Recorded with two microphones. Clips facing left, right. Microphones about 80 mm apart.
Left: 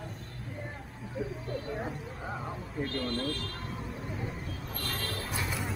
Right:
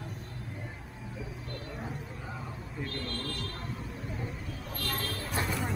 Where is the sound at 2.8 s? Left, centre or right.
Left.